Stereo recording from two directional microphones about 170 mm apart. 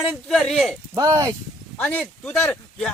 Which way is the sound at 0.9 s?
20° right (ahead or behind).